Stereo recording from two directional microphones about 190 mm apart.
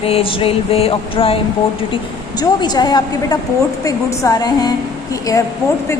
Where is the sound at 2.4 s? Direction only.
20° left (ahead or behind).